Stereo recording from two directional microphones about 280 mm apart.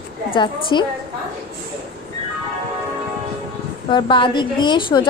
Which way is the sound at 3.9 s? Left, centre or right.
Centre.